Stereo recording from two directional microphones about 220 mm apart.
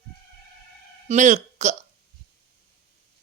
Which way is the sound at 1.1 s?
30° right (ahead or behind).